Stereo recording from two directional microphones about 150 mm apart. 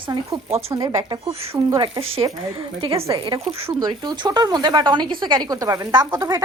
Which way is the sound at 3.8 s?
30° right (ahead or behind).